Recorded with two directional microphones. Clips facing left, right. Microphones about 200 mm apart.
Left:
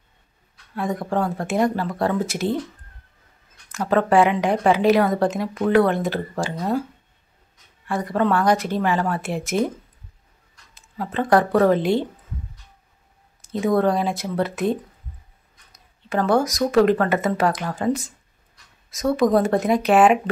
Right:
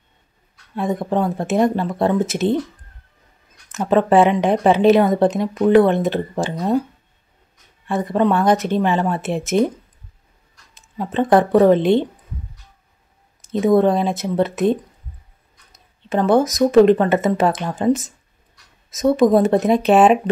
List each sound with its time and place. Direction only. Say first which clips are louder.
0.7 s a woman's voice: right 3 dB; 20° right (ahead or behind)
3.7 s a woman's voice: right 3 dB; 20° right (ahead or behind)
7.8 s a woman's voice: right 4 dB; 20° right (ahead or behind)
10.7 s speech: right 3 dB; 20° right (ahead or behind)
13.4 s a woman's voice: right 5 dB; 20° right (ahead or behind)
16.1 s a woman's voice: right 4 dB; 20° right (ahead or behind)